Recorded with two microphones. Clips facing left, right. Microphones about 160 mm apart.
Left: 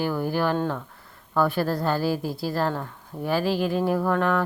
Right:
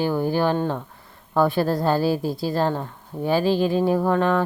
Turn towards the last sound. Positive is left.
turn(degrees=-25)  # may be behind; listen again after turning